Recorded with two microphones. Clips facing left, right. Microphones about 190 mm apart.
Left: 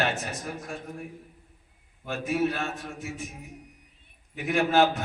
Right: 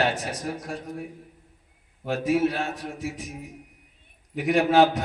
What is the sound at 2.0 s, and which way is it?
A man's voice, 35° right (ahead or behind).